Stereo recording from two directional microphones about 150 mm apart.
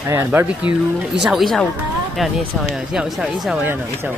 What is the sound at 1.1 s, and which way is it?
Speech, centre (ahead or behind).